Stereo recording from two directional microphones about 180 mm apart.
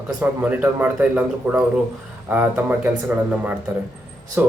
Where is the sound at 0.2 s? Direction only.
10° right (ahead or behind).